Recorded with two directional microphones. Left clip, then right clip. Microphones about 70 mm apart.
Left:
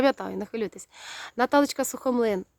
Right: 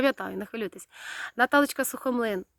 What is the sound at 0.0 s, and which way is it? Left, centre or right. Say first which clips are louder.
Speech: left 2 dB; centre.